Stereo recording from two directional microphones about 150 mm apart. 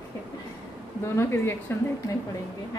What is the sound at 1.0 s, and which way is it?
Speech, 15° left (ahead or behind).